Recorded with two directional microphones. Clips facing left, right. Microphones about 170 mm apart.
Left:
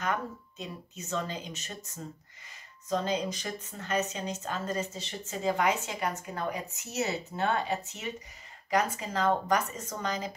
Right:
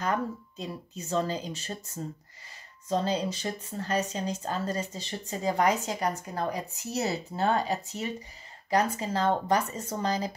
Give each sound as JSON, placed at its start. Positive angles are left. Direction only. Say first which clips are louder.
{"t": 0.0, "sound": "a woman's voice", "louder": "right 3 dB", "side_deg": -35}
{"t": 2.9, "sound": "a woman's voice", "louder": "right 2 dB", "side_deg": -35}